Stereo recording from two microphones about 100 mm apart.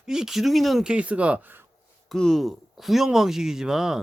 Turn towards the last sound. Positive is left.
turn(degrees=-5)  # may be behind; listen again after turning